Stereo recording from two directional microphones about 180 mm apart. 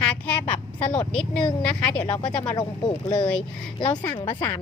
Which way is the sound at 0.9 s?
5° left (ahead or behind).